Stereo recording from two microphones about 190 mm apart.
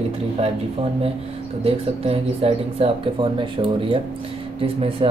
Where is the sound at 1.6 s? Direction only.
30° right (ahead or behind).